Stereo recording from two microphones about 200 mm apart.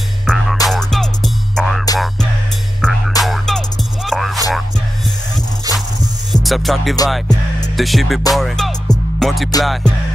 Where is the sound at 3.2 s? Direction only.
Centre (ahead or behind).